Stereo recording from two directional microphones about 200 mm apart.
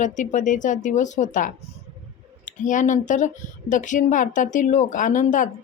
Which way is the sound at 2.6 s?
40° left (ahead or behind).